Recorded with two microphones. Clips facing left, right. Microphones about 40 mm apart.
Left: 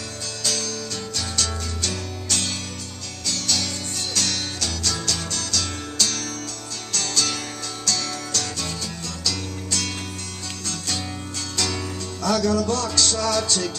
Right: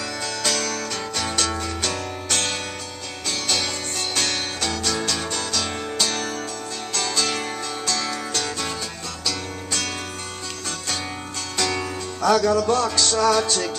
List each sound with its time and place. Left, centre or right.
0.4 s music: right
9.2 s music: centre
11.5 s music: centre